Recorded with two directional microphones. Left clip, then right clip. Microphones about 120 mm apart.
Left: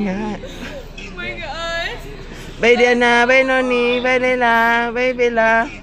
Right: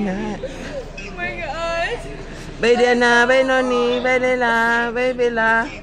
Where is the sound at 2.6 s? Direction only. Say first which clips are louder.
Left 2 dB; 25° left (ahead or behind).